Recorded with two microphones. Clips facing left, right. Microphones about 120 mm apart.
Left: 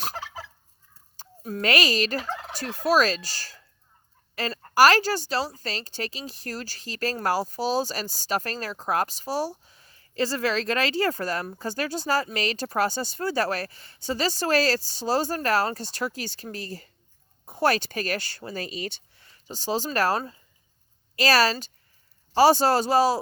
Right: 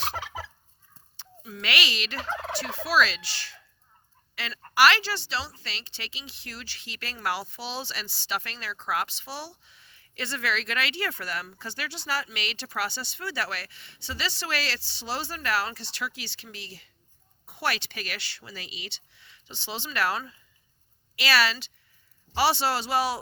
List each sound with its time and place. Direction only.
1.1 s fowl: 45° left (ahead or behind)
4.4 s speech: 40° left (ahead or behind)